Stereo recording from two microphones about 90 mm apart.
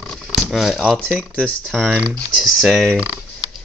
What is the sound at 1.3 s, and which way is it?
Speech, 10° left (ahead or behind).